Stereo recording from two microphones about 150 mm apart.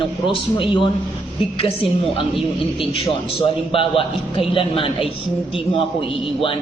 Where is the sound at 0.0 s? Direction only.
35° left (ahead or behind).